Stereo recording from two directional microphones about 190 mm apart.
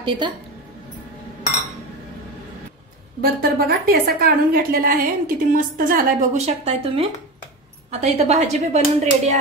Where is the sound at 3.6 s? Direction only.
55° right (ahead or behind).